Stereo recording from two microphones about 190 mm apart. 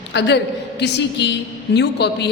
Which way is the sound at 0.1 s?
65° left (ahead or behind).